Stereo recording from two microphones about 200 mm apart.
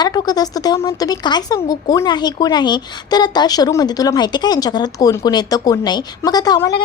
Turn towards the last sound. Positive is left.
turn(degrees=20)  # may be behind; listen again after turning